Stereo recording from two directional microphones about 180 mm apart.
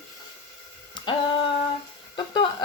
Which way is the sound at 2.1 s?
25° left (ahead or behind).